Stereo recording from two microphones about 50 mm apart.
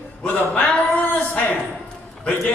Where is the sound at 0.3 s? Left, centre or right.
Left.